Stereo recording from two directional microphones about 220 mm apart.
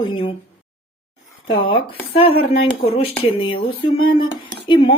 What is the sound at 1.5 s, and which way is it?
Speech, 25° left (ahead or behind).